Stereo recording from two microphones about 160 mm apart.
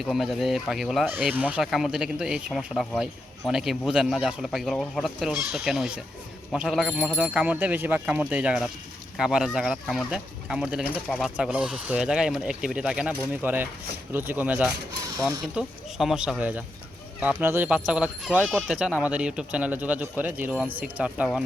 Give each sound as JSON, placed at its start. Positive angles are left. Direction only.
{"t": 0.0, "sound": "speech", "side_deg": 0}